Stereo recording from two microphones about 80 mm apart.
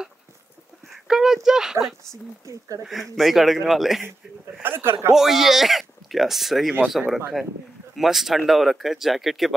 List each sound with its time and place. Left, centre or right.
1.0 s speech: centre
4.6 s a man's voice: right
5.1 s speech: centre